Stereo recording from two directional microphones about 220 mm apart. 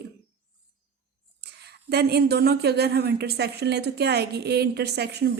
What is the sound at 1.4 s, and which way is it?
A woman's voice, 50° right (ahead or behind).